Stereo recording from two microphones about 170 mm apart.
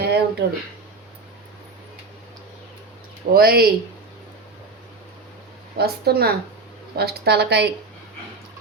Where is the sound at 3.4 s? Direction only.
65° right (ahead or behind).